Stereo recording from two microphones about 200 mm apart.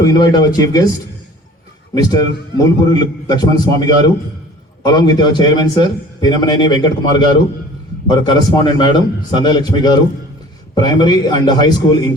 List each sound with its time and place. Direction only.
0.0 s a man's voice: 20° left (ahead or behind)
2.0 s a man's voice: 20° left (ahead or behind)